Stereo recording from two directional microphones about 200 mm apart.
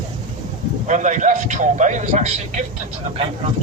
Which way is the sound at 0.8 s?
40° right (ahead or behind).